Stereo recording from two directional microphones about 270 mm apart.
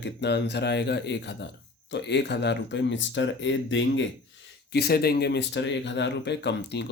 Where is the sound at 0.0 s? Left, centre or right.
Left.